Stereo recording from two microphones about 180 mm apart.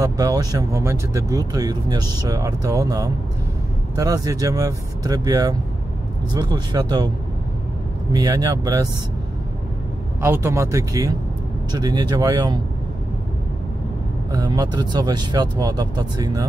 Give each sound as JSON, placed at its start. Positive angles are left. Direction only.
{"t": 0.0, "sound": "speech", "side_deg": -20}
{"t": 8.1, "sound": "speech", "side_deg": -20}
{"t": 10.2, "sound": "speech", "side_deg": -15}
{"t": 14.3, "sound": "speech", "side_deg": -20}